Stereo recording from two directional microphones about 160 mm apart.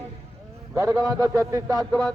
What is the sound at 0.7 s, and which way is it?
A man's voice, 20° right (ahead or behind).